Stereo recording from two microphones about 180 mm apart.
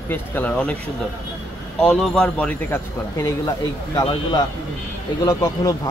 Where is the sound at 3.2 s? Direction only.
20° left (ahead or behind).